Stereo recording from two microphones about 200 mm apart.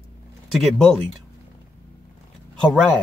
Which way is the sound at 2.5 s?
Centre (ahead or behind).